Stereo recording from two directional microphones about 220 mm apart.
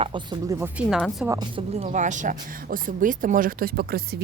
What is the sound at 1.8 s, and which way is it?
Speech, 35° right (ahead or behind).